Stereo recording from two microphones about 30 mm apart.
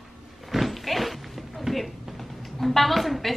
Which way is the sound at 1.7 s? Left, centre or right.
Centre.